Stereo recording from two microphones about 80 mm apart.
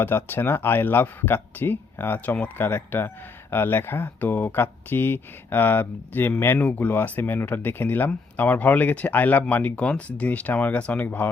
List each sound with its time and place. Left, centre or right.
0.0 s speech: left
2.6 s speech: left